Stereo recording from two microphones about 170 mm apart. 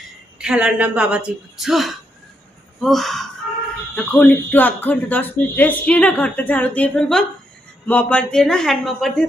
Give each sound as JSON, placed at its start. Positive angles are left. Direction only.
{"t": 0.3, "sound": "a woman's voice", "side_deg": -5}